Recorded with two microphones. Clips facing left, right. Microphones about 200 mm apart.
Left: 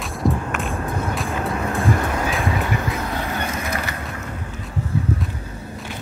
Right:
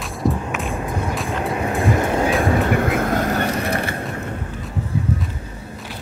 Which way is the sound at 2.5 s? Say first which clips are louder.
Right 6 dB; 55° right (ahead or behind).